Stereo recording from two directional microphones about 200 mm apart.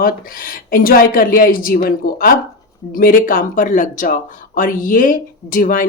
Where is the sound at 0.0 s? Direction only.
45° left (ahead or behind).